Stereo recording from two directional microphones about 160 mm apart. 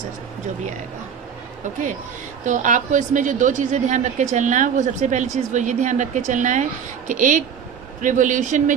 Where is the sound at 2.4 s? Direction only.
50° right (ahead or behind).